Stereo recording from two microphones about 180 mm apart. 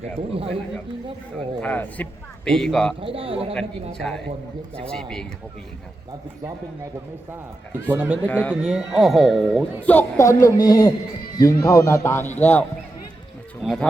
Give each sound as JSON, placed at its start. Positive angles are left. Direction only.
{"t": 0.2, "sound": "speech", "side_deg": -30}
{"t": 1.6, "sound": "a man's voice", "side_deg": 10}
{"t": 3.0, "sound": "speech", "side_deg": -30}
{"t": 4.9, "sound": "a man's voice", "side_deg": 5}
{"t": 7.9, "sound": "speech", "side_deg": -10}
{"t": 8.3, "sound": "speech", "side_deg": 10}
{"t": 8.6, "sound": "a man's voice", "side_deg": 0}